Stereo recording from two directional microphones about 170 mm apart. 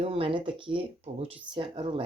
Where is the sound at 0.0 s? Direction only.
35° right (ahead or behind).